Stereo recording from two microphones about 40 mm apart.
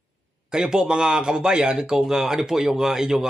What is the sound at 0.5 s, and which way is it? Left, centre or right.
Speech, centre.